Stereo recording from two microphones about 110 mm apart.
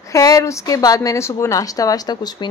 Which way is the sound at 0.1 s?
30° left (ahead or behind).